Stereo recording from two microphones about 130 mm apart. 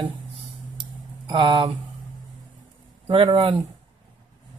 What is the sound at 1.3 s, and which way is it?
Speech, 40° right (ahead or behind).